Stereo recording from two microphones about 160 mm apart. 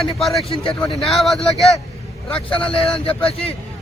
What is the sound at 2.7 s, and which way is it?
Speech, 35° left (ahead or behind).